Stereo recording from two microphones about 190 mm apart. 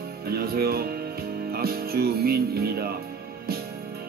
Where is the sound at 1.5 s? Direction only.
55° right (ahead or behind).